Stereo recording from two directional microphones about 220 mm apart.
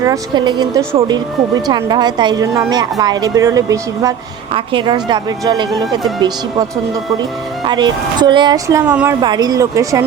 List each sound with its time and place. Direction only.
0.0 s speech: 15° right (ahead or behind)